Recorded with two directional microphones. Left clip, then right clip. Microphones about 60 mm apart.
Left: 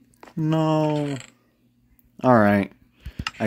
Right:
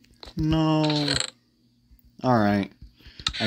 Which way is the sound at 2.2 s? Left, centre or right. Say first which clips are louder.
Left 5 dB; left.